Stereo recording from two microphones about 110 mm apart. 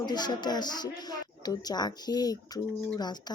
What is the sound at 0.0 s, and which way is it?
Speech, 40° left (ahead or behind).